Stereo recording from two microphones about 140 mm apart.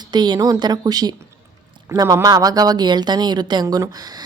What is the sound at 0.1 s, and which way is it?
Speech, 30° right (ahead or behind).